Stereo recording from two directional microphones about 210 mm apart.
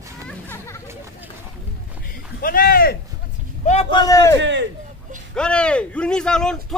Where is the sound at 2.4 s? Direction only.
40° left (ahead or behind).